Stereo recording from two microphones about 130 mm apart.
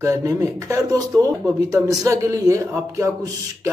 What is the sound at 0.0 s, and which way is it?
Speech, 25° right (ahead or behind).